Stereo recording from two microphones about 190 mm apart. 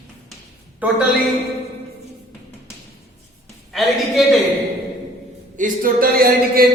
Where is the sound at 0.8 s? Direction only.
5° right (ahead or behind).